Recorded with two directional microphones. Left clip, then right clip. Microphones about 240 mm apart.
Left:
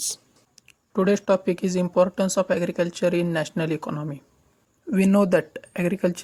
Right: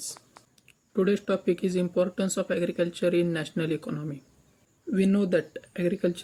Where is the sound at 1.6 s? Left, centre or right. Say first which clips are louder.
Left 9 dB; centre.